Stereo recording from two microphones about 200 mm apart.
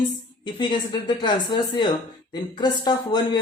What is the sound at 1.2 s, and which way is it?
A woman's voice, 20° left (ahead or behind).